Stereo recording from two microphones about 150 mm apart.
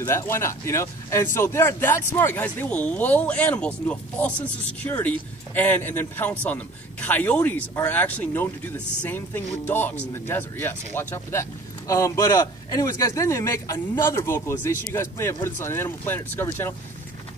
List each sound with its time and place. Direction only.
0.0 s a man's voice: 15° left (ahead or behind)